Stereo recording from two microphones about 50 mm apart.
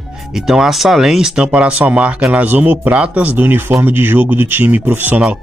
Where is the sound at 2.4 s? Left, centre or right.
Right.